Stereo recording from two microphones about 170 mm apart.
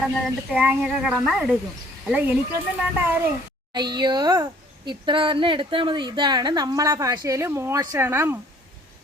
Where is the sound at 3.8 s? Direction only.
25° right (ahead or behind).